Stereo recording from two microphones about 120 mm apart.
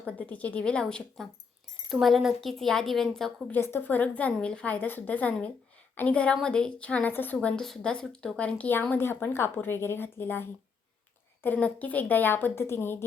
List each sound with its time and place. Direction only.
0.0 s a woman's voice: 10° left (ahead or behind)
3.5 s speech: 20° left (ahead or behind)